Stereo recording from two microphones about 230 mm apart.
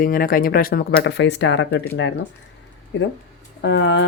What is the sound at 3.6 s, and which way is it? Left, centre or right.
Speech, left.